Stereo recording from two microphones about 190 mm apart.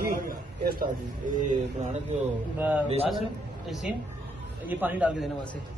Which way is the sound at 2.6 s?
10° right (ahead or behind).